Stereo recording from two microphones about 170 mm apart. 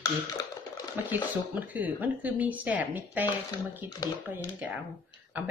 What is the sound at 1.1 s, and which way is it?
Speech, 10° right (ahead or behind).